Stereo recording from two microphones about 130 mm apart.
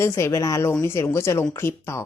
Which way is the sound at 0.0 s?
20° left (ahead or behind).